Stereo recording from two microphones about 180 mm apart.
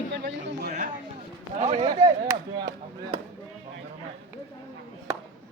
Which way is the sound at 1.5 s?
40° right (ahead or behind).